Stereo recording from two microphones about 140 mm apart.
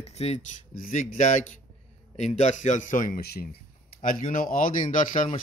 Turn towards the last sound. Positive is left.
turn(degrees=70)  # may be behind; listen again after turning